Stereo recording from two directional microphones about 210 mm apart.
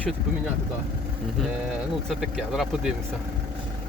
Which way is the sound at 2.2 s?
Centre (ahead or behind).